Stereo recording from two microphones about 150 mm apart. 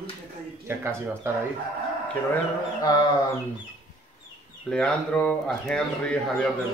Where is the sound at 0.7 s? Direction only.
15° right (ahead or behind).